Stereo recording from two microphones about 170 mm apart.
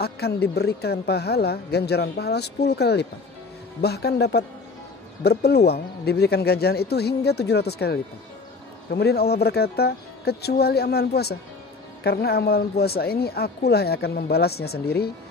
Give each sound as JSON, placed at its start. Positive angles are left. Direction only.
{"t": 0.0, "sound": "speech", "side_deg": 70}